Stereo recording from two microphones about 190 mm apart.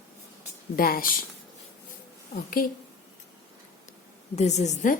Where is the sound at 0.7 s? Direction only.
50° left (ahead or behind).